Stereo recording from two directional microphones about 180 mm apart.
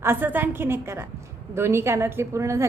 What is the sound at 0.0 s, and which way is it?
A woman's voice, 10° right (ahead or behind).